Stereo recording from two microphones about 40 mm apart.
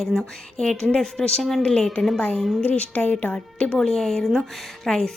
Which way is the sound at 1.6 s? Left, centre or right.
Centre.